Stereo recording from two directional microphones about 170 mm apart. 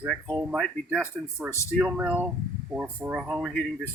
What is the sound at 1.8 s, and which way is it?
Speech, 5° right (ahead or behind).